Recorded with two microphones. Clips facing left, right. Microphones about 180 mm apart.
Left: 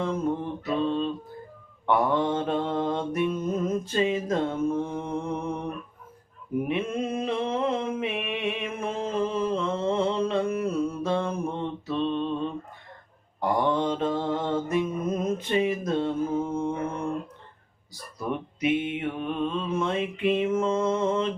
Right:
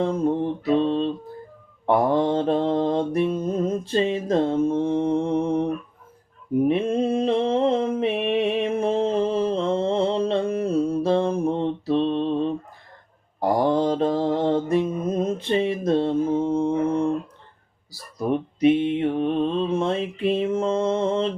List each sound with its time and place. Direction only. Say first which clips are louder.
0.0 s mantra: right 5 dB; 30° right (ahead or behind)
18.2 s mantra: right 8 dB; 35° right (ahead or behind)